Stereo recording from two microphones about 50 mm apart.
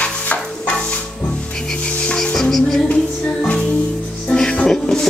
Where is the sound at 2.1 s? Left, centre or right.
Centre.